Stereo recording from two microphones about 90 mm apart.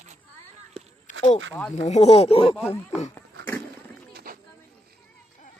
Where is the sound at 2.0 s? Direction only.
90° left.